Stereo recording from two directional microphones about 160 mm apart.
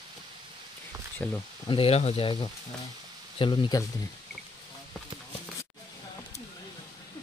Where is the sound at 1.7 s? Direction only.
35° left (ahead or behind).